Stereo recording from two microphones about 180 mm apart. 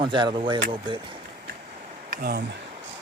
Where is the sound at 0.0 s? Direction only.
25° right (ahead or behind).